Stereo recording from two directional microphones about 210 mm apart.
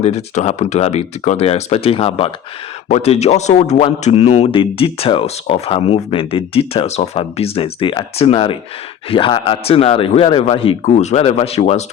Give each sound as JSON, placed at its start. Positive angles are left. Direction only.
{"t": 0.0, "sound": "speech", "side_deg": 30}